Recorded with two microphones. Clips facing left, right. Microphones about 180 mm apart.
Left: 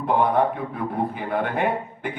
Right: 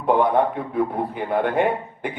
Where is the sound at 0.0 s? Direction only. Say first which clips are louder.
Right 2 dB; 55° right (ahead or behind).